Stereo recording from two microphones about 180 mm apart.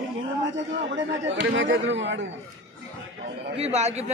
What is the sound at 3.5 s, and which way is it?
Speech, 35° right (ahead or behind).